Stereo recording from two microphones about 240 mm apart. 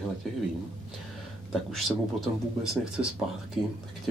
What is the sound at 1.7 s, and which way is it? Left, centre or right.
Speech, centre.